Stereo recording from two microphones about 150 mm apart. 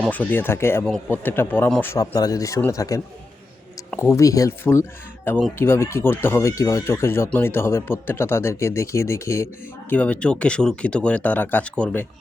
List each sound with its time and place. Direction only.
0.1 s speech: 10° left (ahead or behind)
0.9 s speech: 5° left (ahead or behind)
2.0 s speech: 25° left (ahead or behind); by 12.0 s 5° left (ahead or behind)